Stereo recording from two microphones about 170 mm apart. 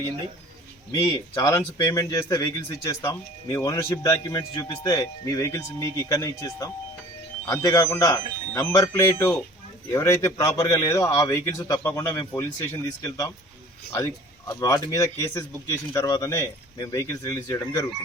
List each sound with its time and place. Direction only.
1.4 s speech: 20° left (ahead or behind)